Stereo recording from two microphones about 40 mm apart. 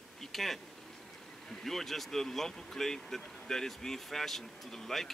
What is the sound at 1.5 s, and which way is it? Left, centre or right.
Speech, centre.